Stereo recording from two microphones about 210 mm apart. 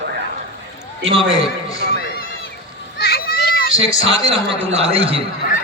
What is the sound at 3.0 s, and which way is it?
Children playing, 45° left (ahead or behind).